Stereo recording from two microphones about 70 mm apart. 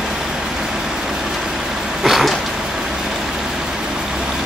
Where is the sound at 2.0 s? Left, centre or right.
Centre.